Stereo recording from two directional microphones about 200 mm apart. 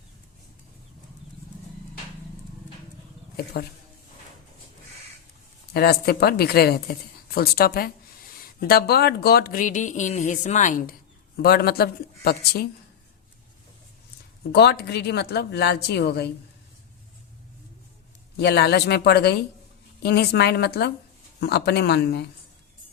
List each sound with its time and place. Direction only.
5.7 s speech: 50° left (ahead or behind)
14.5 s a woman's voice: 55° left (ahead or behind)
18.3 s a woman's voice: 55° left (ahead or behind)